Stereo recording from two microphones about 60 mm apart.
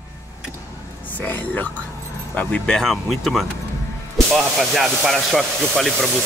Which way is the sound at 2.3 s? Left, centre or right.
Left.